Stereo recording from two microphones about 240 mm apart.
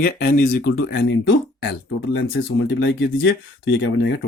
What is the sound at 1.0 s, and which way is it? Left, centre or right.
Speech, left.